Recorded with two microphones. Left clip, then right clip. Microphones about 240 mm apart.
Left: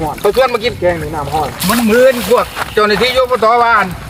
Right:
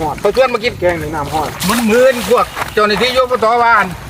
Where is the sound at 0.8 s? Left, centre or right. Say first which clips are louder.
Even; right.